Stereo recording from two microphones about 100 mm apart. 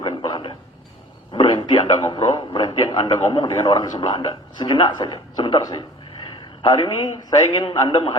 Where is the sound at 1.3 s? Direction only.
65° left (ahead or behind).